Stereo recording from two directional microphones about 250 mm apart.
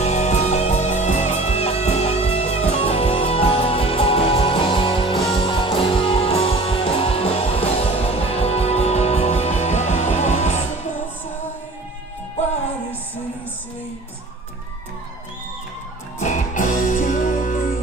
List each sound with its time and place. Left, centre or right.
0.0 s music: left
16.2 s music: left